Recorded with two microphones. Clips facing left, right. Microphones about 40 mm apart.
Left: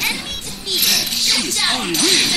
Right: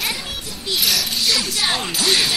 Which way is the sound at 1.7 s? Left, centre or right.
Centre.